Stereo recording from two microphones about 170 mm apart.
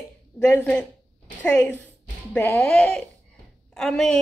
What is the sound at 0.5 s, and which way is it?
Speech, 10° left (ahead or behind).